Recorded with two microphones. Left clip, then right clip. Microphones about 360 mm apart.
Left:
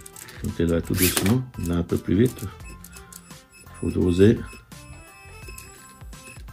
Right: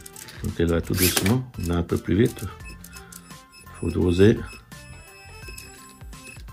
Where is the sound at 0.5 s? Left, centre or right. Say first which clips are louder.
Even; centre.